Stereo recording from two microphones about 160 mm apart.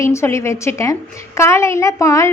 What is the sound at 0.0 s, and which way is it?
A woman's voice, 15° left (ahead or behind).